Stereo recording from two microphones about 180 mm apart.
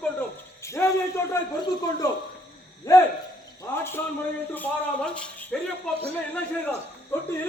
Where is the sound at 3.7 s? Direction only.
10° left (ahead or behind).